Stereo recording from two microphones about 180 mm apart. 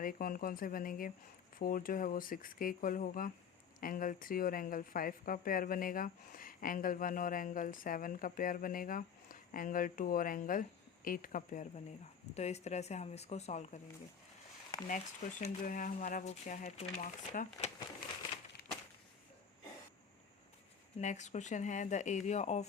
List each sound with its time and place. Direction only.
0.0 s a woman's voice: 50° left (ahead or behind)
14.8 s a woman's voice: 40° left (ahead or behind)
17.3 s a woman's voice: 45° left (ahead or behind)
21.0 s speech: 40° left (ahead or behind)